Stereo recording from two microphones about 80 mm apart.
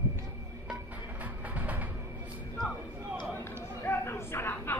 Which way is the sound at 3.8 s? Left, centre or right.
Left.